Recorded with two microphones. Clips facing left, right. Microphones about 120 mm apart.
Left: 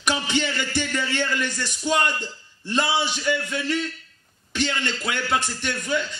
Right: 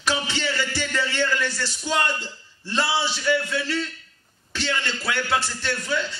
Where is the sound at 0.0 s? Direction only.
15° left (ahead or behind).